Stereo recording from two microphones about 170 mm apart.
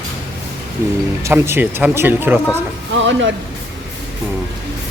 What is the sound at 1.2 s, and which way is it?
Speech, 15° right (ahead or behind).